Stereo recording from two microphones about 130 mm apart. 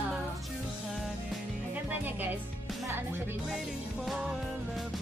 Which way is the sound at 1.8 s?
15° right (ahead or behind).